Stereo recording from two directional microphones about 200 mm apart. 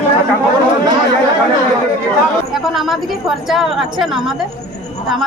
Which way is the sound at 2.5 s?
Centre (ahead or behind).